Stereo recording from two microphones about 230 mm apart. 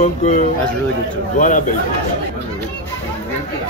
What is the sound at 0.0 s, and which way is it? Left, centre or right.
Speech, left.